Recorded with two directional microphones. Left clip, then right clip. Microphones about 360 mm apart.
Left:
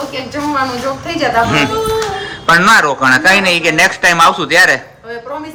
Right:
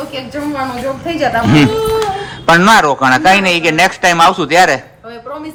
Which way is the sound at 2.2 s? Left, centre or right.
Centre.